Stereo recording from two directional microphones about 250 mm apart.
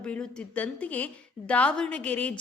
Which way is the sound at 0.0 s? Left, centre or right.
Centre.